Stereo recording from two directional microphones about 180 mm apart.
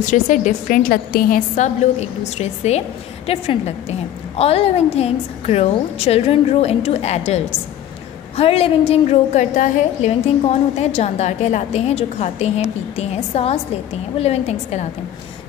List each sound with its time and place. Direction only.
0.0 s a woman's voice: 45° left (ahead or behind)